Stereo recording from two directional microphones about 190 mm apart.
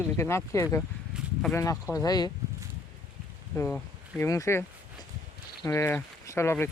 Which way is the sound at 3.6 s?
10° left (ahead or behind).